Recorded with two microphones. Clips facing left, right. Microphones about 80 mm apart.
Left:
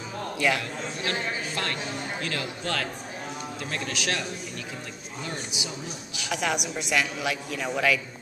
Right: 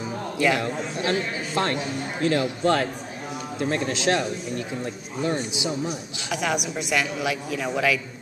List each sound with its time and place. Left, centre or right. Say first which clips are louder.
1.0 s a man's voice: right 4 dB; right
6.3 s a woman's voice: right 2 dB; centre